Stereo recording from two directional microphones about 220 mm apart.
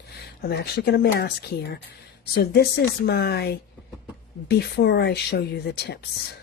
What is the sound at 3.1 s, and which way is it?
A woman's voice, 45° left (ahead or behind).